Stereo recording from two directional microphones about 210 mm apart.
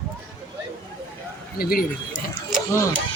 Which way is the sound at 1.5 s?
45° left (ahead or behind).